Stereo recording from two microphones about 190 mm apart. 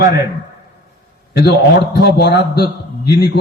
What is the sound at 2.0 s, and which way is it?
A man's voice, 60° left (ahead or behind).